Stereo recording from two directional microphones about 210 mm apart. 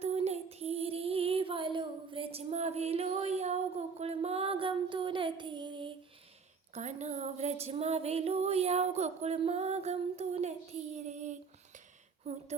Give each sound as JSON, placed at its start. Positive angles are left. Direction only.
{"t": 0.0, "sound": "child singing", "side_deg": -30}
{"t": 6.7, "sound": "female singing", "side_deg": -30}
{"t": 12.3, "sound": "a sound", "side_deg": -30}